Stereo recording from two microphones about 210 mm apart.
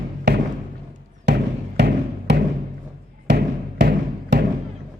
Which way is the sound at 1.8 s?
50° right (ahead or behind).